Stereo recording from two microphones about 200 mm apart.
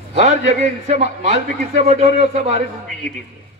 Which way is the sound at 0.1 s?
35° right (ahead or behind).